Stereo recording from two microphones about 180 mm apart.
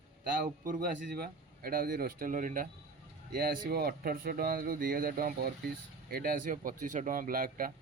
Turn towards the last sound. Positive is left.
turn(degrees=-50)  # may be behind; listen again after turning